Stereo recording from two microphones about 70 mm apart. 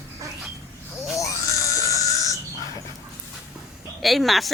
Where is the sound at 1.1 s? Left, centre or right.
Left.